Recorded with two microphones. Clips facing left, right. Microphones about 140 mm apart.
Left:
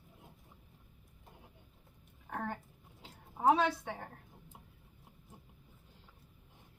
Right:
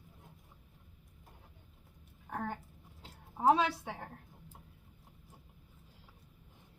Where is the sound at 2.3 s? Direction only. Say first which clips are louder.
Right 1 dB; centre (ahead or behind).